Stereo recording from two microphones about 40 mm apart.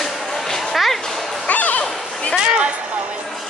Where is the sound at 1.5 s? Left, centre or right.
Left.